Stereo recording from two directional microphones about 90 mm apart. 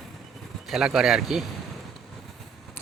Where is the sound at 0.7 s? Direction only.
5° right (ahead or behind).